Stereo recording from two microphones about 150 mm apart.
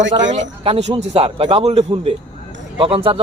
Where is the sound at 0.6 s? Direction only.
45° right (ahead or behind).